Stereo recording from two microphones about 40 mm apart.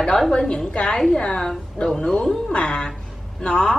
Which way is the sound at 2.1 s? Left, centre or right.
Centre.